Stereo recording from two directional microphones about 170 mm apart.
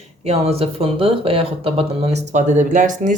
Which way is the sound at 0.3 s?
35° right (ahead or behind).